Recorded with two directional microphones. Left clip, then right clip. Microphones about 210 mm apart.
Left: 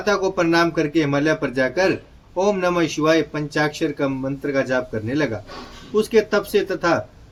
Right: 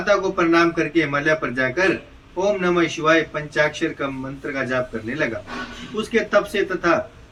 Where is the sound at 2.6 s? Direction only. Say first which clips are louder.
Even; 55° left (ahead or behind).